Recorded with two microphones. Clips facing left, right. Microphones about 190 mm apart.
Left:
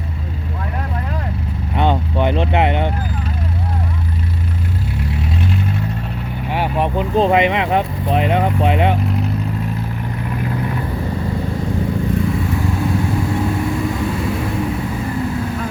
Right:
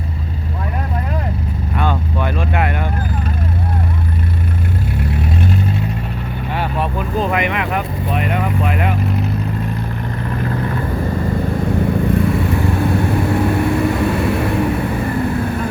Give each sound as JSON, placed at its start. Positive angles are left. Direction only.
{"t": 1.7, "sound": "vehicle", "side_deg": 20}
{"t": 5.1, "sound": "vehicle", "side_deg": -50}
{"t": 6.5, "sound": "speech", "side_deg": 15}
{"t": 10.2, "sound": "vehicle", "side_deg": 10}
{"t": 11.5, "sound": "vehicle", "side_deg": -60}